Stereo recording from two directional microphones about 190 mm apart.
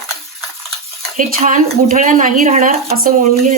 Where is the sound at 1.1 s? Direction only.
45° right (ahead or behind).